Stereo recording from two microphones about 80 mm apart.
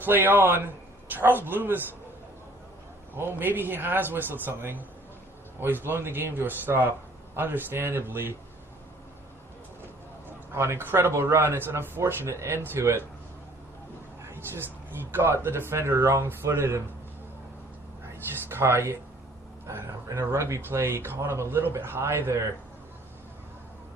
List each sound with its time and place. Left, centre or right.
0.0 s a man's voice: right
3.2 s a man's voice: right
10.5 s speech: right
14.3 s a sound: right
15.1 s speech: right
18.0 s speech: right
20.1 s speech: right